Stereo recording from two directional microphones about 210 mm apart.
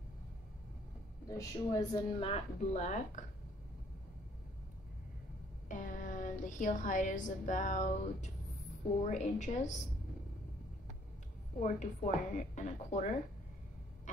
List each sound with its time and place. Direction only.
1.3 s a woman's voice: 15° left (ahead or behind); by 3.3 s 35° left (ahead or behind)
5.7 s a woman's voice: 40° left (ahead or behind)
11.6 s speech: 35° left (ahead or behind)